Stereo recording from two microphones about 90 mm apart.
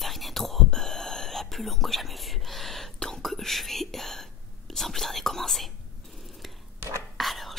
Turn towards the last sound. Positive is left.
turn(degrees=0)  # may be behind; listen again after turning